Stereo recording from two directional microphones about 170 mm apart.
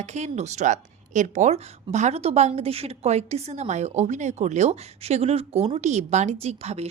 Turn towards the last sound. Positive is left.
turn(degrees=-40)  # may be behind; listen again after turning